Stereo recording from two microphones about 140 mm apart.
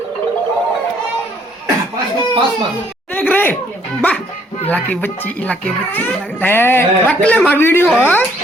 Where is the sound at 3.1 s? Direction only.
10° left (ahead or behind).